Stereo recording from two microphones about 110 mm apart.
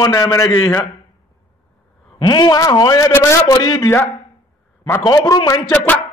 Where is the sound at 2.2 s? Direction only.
40° left (ahead or behind).